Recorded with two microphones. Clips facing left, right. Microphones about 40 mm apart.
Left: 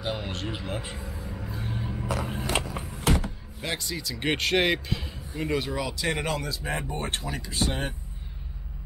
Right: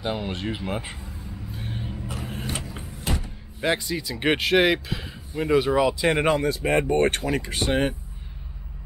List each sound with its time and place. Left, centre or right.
0.0 s speech: centre
2.0 s a sound: left
2.5 s vehicle: left
3.0 s a sound: left
3.6 s speech: centre
6.4 s speech: right